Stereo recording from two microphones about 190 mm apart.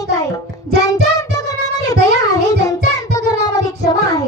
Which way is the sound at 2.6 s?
20° left (ahead or behind).